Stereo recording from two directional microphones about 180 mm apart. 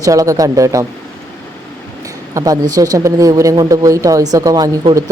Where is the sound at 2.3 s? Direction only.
20° right (ahead or behind).